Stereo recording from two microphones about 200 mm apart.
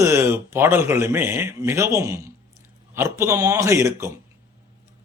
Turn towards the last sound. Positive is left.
turn(degrees=-15)  # may be behind; listen again after turning